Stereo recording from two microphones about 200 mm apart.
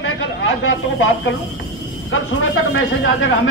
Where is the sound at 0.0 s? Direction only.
80° left.